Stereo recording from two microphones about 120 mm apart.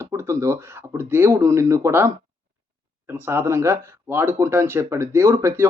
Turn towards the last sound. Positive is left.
turn(degrees=-20)  # may be behind; listen again after turning